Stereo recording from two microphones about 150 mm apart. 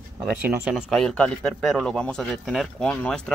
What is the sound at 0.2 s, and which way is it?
A man's voice, 10° right (ahead or behind).